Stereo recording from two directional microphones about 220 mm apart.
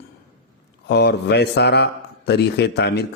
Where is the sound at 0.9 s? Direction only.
50° left (ahead or behind).